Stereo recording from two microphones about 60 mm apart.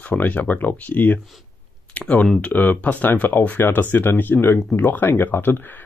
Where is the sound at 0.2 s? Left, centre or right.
Left.